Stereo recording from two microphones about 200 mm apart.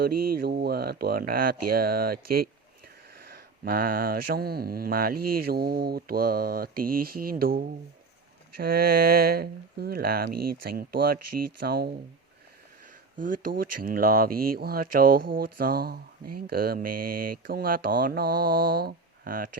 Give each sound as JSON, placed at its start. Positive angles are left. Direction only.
{"t": 0.0, "sound": "speech", "side_deg": -50}
{"t": 13.1, "sound": "speech", "side_deg": -45}